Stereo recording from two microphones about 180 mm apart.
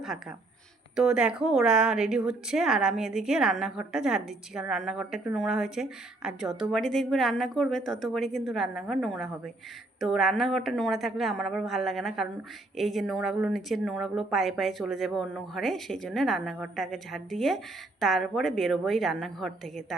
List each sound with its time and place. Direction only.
0.0 s a woman's voice: centre (ahead or behind)